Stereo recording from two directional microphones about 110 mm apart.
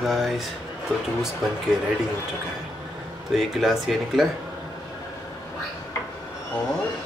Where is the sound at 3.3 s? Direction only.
Centre (ahead or behind).